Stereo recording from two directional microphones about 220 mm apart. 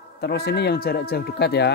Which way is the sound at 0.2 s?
45° left (ahead or behind).